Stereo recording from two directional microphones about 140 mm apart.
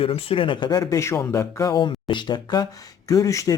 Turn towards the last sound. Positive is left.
turn(degrees=25)  # may be behind; listen again after turning